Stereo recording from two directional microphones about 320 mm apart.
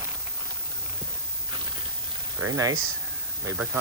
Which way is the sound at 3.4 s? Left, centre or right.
Centre.